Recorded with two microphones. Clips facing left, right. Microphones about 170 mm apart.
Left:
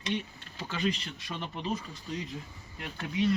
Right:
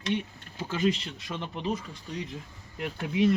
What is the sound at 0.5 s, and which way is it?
Speech, 10° right (ahead or behind).